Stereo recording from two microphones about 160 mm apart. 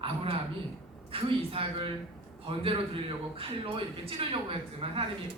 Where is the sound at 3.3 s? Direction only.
35° right (ahead or behind).